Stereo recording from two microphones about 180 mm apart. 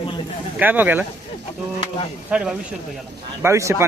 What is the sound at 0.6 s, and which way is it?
Speech, 10° right (ahead or behind).